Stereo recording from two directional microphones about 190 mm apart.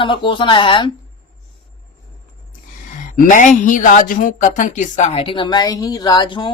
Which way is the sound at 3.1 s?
40° left (ahead or behind).